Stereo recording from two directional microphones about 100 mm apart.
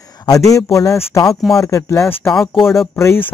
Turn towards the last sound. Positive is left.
turn(degrees=30)  # may be behind; listen again after turning